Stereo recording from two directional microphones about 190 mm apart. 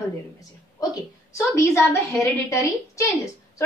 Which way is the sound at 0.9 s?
15° left (ahead or behind).